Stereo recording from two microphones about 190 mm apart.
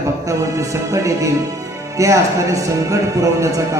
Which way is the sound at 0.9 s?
15° right (ahead or behind).